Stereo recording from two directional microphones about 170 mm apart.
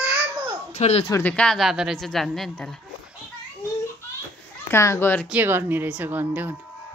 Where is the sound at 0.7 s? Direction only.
40° left (ahead or behind).